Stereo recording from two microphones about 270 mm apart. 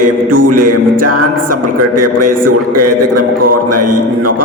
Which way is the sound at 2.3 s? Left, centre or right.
Right.